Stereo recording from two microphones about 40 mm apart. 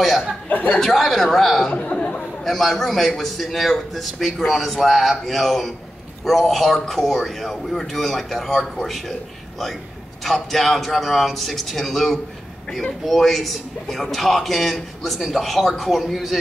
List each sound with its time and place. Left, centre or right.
0.5 s speech: left
0.7 s a man's voice: centre
1.7 s speech: left
2.4 s a man's voice: centre
10.2 s a man's voice: centre